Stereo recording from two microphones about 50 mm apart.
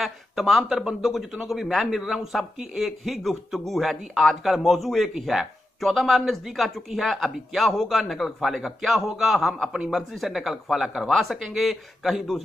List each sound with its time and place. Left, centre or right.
0.0 s a man's voice: centre
9.7 s a man's voice: centre
9.9 s a man's voice: centre